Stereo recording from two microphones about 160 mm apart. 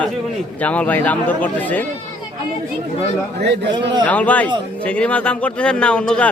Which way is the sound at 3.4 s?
90° right.